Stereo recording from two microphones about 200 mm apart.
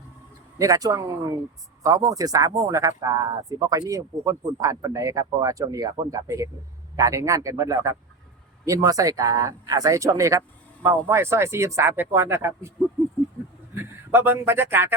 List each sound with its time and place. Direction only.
0.6 s speech: 15° right (ahead or behind)
14.1 s speech: 10° right (ahead or behind)